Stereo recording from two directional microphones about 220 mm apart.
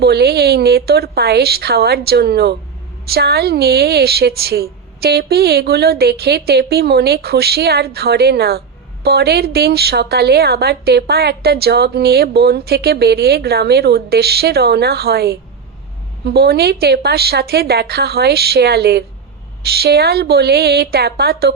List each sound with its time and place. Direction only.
0.0 s a woman's voice: 45° right (ahead or behind)